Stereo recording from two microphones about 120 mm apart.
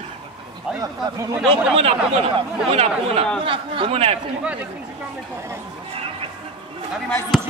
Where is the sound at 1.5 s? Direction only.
55° right (ahead or behind).